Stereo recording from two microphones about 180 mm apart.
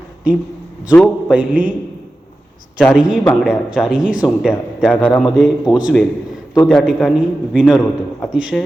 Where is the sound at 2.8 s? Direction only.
Centre (ahead or behind).